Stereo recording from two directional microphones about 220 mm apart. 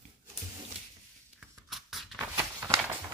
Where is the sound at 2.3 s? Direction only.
10° right (ahead or behind).